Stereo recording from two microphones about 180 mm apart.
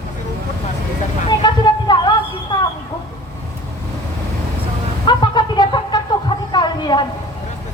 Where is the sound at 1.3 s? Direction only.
25° left (ahead or behind).